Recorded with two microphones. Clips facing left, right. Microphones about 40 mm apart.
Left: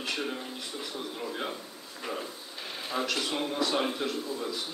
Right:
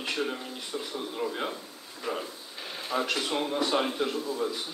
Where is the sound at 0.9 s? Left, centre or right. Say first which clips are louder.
Right 4 dB; centre.